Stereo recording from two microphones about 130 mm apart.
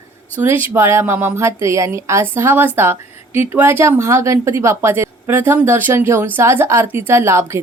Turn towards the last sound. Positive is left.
turn(degrees=-20)  # may be behind; listen again after turning